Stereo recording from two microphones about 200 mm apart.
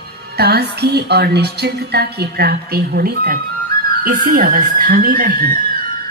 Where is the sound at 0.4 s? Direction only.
55° right (ahead or behind).